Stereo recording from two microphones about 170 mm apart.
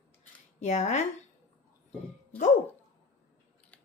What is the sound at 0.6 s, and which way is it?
Speech, 45° left (ahead or behind).